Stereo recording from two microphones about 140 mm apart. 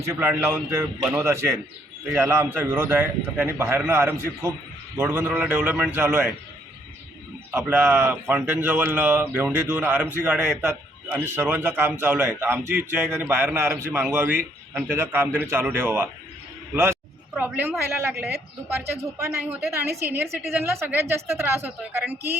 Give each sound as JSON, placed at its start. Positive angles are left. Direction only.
{"t": 0.0, "sound": "a man's voice", "side_deg": -20}
{"t": 7.5, "sound": "a man's voice", "side_deg": -15}
{"t": 19.5, "sound": "a man's voice", "side_deg": -10}